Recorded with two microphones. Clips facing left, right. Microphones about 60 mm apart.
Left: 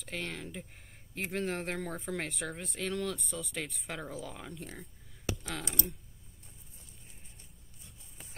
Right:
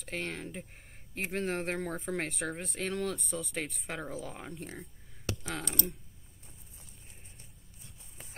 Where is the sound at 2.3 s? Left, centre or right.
Right.